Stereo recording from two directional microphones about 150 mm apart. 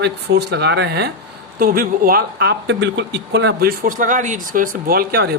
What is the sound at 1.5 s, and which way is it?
Speech, 75° right (ahead or behind).